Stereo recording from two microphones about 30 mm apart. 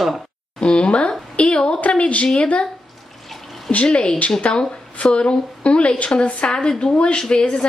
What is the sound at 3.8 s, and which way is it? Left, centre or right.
Speech, left.